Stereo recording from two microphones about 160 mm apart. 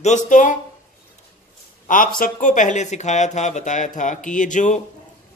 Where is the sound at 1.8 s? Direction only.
60° left (ahead or behind).